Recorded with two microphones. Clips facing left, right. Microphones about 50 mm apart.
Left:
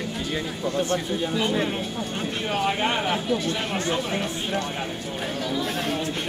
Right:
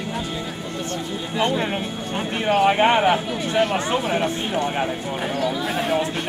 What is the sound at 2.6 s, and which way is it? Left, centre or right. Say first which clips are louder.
Speech: right 8 dB; right.